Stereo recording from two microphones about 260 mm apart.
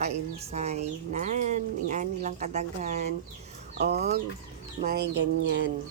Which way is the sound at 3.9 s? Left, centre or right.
Right.